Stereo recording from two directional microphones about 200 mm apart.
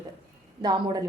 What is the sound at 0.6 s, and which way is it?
Speech, 20° right (ahead or behind).